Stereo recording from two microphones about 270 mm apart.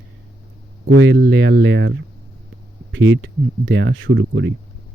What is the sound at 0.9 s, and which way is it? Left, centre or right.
Speech, right.